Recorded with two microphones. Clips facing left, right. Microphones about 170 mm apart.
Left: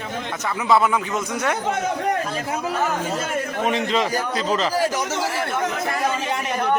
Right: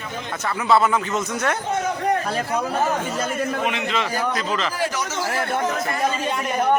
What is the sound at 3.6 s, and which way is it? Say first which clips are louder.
A man's voice: left 3 dB; 40° left (ahead or behind).